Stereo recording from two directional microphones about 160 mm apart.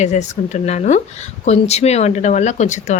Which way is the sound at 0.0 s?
45° left (ahead or behind).